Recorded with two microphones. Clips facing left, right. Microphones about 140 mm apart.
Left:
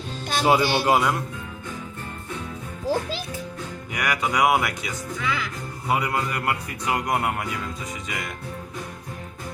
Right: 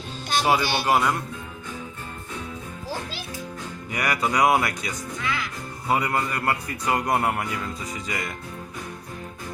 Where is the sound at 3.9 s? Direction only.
Centre (ahead or behind).